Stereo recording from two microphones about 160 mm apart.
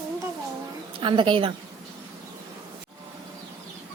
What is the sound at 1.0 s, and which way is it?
Speech, 30° right (ahead or behind).